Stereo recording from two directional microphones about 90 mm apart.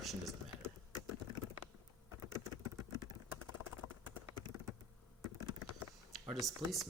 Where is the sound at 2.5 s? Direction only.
50° right (ahead or behind).